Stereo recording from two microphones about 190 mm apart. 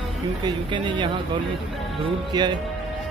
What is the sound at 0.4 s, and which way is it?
Speech, 25° right (ahead or behind).